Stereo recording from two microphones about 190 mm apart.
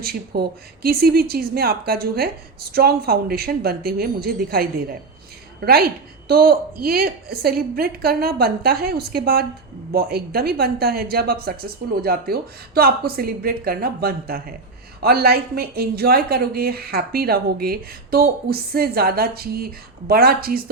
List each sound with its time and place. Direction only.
0.0 s a woman's voice: 55° right (ahead or behind)